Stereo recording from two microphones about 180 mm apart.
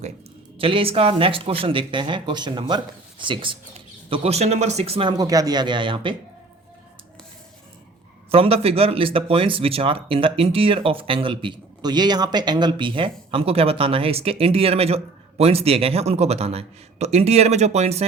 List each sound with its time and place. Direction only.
0.6 s speech: 30° right (ahead or behind)
8.3 s speech: 35° right (ahead or behind)